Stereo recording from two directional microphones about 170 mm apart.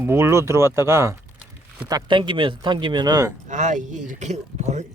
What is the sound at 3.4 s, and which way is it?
Speech, 45° right (ahead or behind).